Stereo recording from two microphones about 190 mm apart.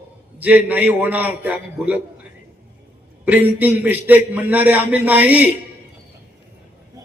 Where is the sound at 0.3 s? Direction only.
10° right (ahead or behind).